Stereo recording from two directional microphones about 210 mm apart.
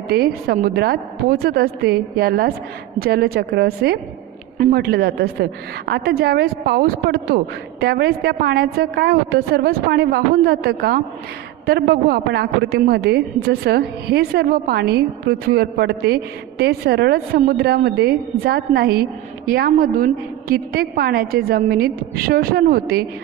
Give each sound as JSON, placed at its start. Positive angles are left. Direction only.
{"t": 0.1, "sound": "a woman's voice", "side_deg": -50}